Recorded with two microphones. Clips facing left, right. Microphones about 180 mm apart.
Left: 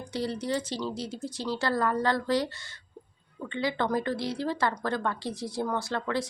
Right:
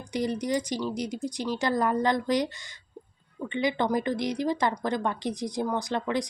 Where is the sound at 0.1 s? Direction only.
15° right (ahead or behind).